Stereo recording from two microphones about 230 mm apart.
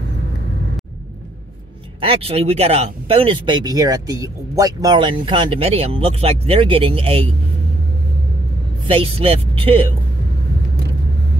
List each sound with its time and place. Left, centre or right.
2.0 s speech: right
8.8 s speech: right